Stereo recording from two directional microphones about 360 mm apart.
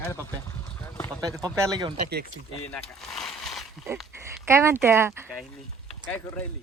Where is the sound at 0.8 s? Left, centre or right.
Centre.